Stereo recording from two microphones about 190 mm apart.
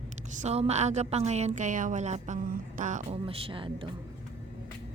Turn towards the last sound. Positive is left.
turn(degrees=-25)  # may be behind; listen again after turning